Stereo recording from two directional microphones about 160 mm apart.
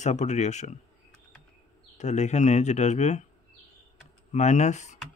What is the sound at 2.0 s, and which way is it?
Speech, 45° left (ahead or behind).